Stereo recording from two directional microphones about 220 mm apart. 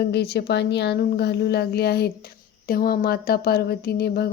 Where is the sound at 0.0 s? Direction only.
45° left (ahead or behind).